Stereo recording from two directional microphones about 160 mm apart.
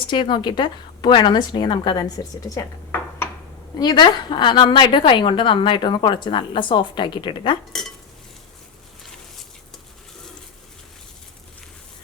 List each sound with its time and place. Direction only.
0.1 s a woman's voice: 30° left (ahead or behind)
3.8 s a woman's voice: 25° left (ahead or behind)